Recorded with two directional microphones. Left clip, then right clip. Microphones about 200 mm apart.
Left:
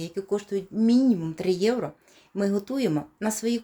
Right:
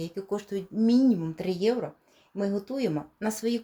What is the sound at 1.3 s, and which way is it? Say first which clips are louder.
Speech: left 3 dB; 15° left (ahead or behind).